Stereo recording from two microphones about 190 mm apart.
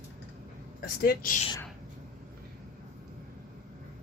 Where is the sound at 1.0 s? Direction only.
50° left (ahead or behind).